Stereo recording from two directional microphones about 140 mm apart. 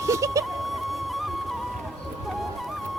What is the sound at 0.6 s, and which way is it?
Flute, centre (ahead or behind).